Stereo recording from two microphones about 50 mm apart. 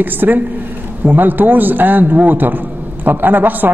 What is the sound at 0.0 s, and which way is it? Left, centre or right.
A man's voice, right.